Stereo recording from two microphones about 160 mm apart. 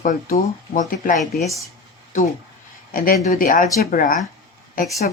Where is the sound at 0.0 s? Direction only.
60° left (ahead or behind).